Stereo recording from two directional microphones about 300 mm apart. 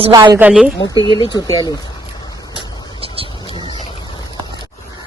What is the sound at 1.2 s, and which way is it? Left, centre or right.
Speech, centre.